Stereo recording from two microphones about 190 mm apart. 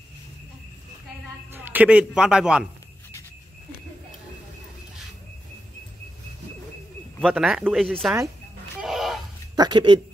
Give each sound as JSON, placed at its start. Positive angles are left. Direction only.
{"t": 1.5, "sound": "a man's voice", "side_deg": -10}
{"t": 7.2, "sound": "a man's voice", "side_deg": 0}
{"t": 8.8, "sound": "a sound", "side_deg": 0}
{"t": 9.6, "sound": "speech", "side_deg": -25}